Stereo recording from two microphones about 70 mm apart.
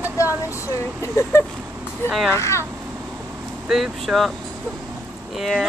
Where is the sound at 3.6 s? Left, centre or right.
Centre.